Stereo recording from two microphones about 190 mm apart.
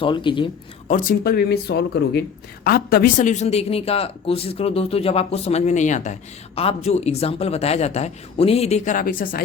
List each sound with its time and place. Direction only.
0.0 s a man's voice: 25° left (ahead or behind)
0.9 s a woman's voice: 45° left (ahead or behind)